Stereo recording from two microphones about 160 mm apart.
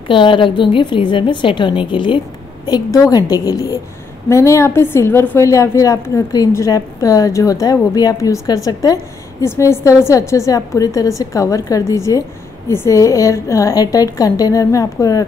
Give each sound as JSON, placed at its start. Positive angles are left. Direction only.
{"t": 0.1, "sound": "a woman's voice", "side_deg": 30}